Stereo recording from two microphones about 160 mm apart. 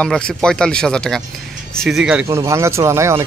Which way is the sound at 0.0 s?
5° left (ahead or behind).